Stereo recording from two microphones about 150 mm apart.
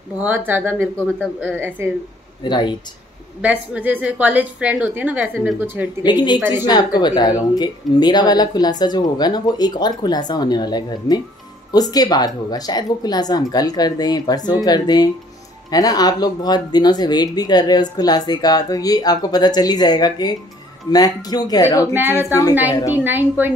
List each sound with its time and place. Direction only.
0.2 s a woman's voice: 10° right (ahead or behind)
2.4 s speech: 30° left (ahead or behind)
3.3 s a woman's voice: 5° right (ahead or behind)
6.0 s speech: 30° left (ahead or behind)
22.9 s a woman's voice: 15° right (ahead or behind)